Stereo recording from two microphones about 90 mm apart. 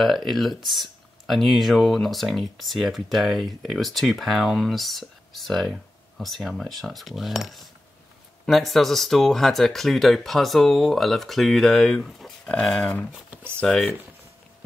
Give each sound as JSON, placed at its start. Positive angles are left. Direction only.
{"t": 0.0, "sound": "speech", "side_deg": 0}
{"t": 13.3, "sound": "a sound", "side_deg": -25}
{"t": 13.6, "sound": "speech", "side_deg": 5}